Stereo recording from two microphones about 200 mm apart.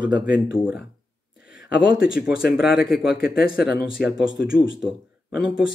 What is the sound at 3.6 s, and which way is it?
Speech, 55° left (ahead or behind).